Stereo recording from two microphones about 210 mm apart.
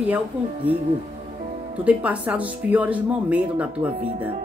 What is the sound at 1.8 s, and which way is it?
Speech, 5° right (ahead or behind).